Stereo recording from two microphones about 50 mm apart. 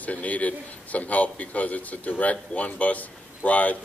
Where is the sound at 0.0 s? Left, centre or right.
Left.